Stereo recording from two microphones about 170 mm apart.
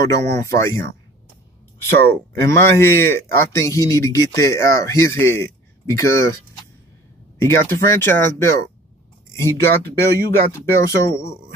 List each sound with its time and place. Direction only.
0.1 s speech: 15° left (ahead or behind)
2.0 s speech: 15° left (ahead or behind)
7.3 s speech: 15° left (ahead or behind)